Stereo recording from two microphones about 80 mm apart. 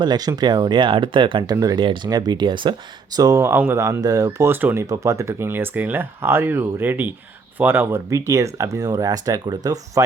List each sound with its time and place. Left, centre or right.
0.0 s speech: right
2.0 s speech: right
3.2 s speech: right
3.7 s speech: right
4.0 s speech: right
4.4 s speech: right
4.8 s speech: right
7.9 s speech: right